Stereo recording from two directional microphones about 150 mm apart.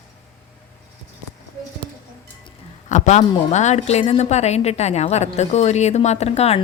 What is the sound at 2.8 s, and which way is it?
A woman's voice, 55° left (ahead or behind).